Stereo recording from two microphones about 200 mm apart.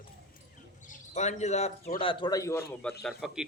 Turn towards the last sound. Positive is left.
turn(degrees=0)  # may be behind; listen again after turning